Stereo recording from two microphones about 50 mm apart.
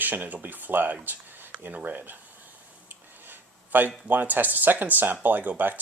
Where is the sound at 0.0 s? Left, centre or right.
Right.